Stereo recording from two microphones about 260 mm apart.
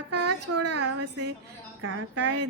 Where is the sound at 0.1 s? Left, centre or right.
Right.